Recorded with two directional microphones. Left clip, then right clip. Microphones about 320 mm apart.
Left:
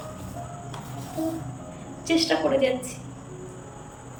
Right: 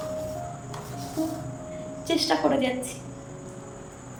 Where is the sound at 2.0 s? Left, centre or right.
Centre.